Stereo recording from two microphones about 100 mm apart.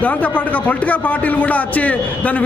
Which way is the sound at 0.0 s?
15° left (ahead or behind).